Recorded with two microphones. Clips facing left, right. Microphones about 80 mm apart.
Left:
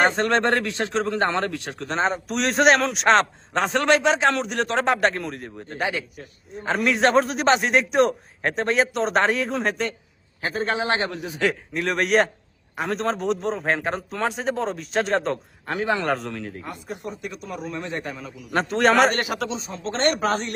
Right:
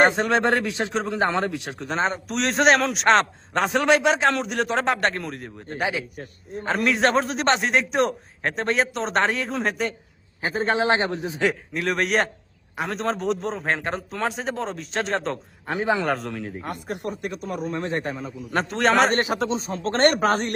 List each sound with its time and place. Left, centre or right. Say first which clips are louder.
0.1 s a man's voice: even; centre
1.9 s a man's voice: left 1 dB; centre
10.4 s a man's voice: right 2 dB; right
11.7 s a man's voice: left 2 dB; centre
15.6 s a man's voice: right 1 dB; centre
16.0 s a man's voice: even; centre
16.6 s a man's voice: right 3 dB; right
18.5 s a man's voice: left 2 dB; centre
19.1 s speech: right 3 dB; right